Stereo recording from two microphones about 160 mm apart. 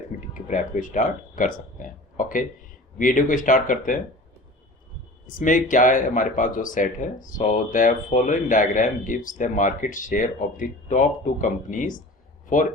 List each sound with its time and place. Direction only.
0.3 s speech: 55° left (ahead or behind)
5.2 s speech: 55° left (ahead or behind)